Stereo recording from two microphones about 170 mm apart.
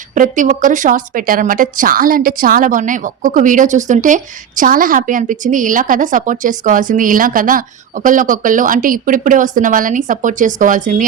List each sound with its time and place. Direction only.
0.1 s speech: 50° right (ahead or behind)